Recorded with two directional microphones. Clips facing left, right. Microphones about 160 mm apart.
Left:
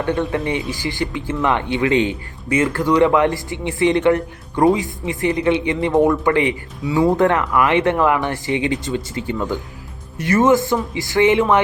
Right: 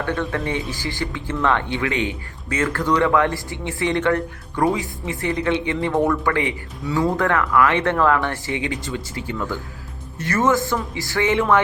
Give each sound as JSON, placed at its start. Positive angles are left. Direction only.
{"t": 0.0, "sound": "speech", "side_deg": 20}
{"t": 2.5, "sound": "speech", "side_deg": 15}